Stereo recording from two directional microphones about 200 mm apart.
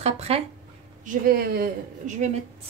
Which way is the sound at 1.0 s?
50° right (ahead or behind).